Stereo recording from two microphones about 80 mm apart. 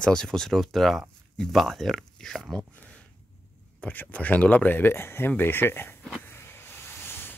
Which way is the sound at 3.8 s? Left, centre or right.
Centre.